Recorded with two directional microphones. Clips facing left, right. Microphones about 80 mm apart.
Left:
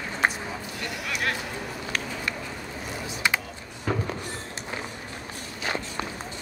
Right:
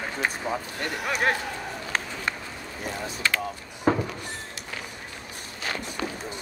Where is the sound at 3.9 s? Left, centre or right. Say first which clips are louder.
Right 6 dB; right.